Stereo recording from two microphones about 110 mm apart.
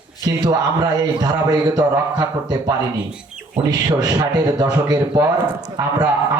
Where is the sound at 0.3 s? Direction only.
35° right (ahead or behind).